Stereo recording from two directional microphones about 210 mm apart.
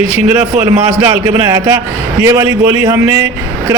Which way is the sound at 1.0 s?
15° right (ahead or behind).